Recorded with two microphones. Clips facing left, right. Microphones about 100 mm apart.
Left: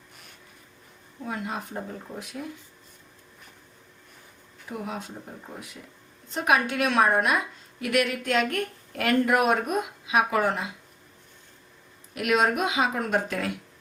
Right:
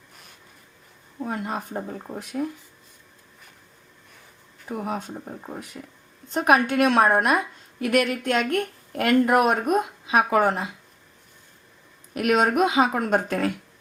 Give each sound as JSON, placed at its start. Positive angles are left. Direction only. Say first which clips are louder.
{"t": 1.2, "sound": "a woman's voice", "louder": "right 4 dB", "side_deg": -45}
{"t": 4.8, "sound": "a woman's voice", "louder": "right 5 dB", "side_deg": -45}
{"t": 12.1, "sound": "a woman's voice", "louder": "right 3 dB", "side_deg": -45}